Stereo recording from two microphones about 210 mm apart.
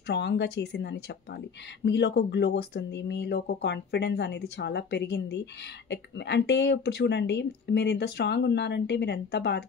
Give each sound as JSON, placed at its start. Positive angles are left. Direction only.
{"t": 0.0, "sound": "speech", "side_deg": 55}